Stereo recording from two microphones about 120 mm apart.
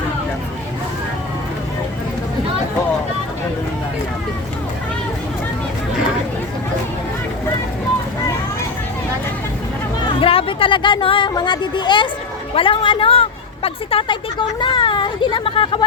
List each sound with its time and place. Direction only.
10.2 s a woman's voice: 50° left (ahead or behind)